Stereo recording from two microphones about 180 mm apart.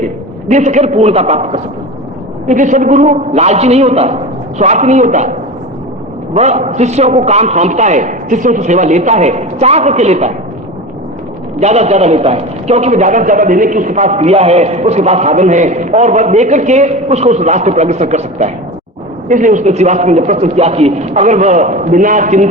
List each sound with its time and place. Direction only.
0.5 s a man's voice: 40° right (ahead or behind)
6.3 s a man's voice: 40° right (ahead or behind)
11.6 s a man's voice: 40° right (ahead or behind)